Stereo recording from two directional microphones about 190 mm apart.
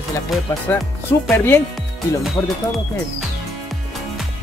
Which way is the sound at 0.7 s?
10° left (ahead or behind).